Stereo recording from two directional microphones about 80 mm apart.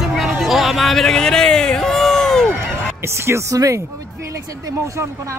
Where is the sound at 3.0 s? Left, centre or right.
Right.